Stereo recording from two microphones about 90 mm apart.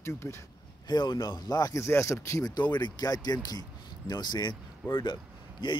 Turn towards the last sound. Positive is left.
turn(degrees=65)  # may be behind; listen again after turning